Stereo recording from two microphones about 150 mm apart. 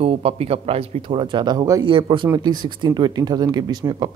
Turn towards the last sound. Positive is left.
turn(degrees=-25)  # may be behind; listen again after turning